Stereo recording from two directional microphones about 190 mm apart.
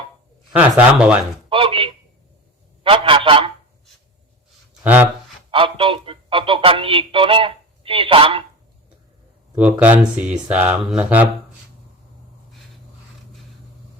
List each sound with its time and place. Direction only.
0.5 s speech: 10° right (ahead or behind)
1.5 s a man's voice: 30° right (ahead or behind)
4.8 s speech: 10° right (ahead or behind)
5.5 s speech: 25° right (ahead or behind)
9.6 s speech: 5° right (ahead or behind)